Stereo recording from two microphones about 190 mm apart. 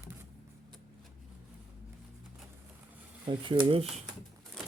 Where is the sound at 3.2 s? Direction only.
25° right (ahead or behind).